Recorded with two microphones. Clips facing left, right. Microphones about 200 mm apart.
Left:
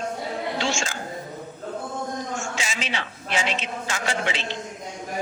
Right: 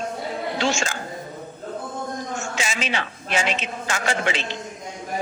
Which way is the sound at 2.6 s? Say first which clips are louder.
Right 3 dB; 50° right (ahead or behind).